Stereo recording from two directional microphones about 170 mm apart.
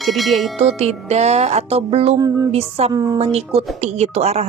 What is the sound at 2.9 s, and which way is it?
Speech, 20° right (ahead or behind).